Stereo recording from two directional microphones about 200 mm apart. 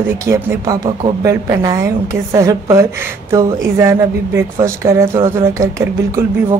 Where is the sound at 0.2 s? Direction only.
15° right (ahead or behind).